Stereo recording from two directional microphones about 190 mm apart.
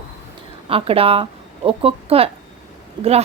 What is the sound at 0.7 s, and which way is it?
Speech, 30° right (ahead or behind).